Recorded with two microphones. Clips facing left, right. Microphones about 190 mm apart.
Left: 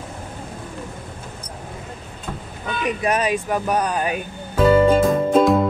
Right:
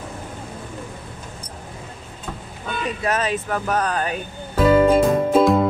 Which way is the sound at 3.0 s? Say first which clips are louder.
Left 2 dB; 15° left (ahead or behind).